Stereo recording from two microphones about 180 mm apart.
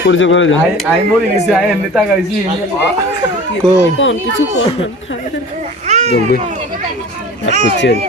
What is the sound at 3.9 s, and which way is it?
Speech, 90° left.